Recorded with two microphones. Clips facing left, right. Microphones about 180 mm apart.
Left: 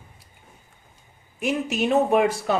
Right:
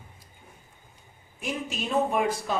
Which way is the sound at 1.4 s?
70° left (ahead or behind).